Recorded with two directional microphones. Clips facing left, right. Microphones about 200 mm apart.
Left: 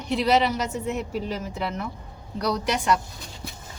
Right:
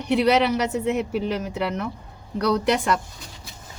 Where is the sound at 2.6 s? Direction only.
55° right (ahead or behind).